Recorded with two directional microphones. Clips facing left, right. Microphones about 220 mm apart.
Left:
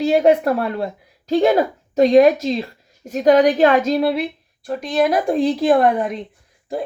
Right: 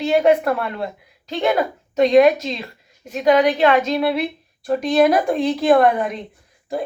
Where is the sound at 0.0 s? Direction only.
35° left (ahead or behind).